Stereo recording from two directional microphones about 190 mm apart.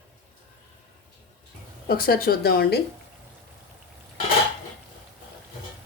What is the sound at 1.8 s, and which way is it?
Speech, 50° left (ahead or behind).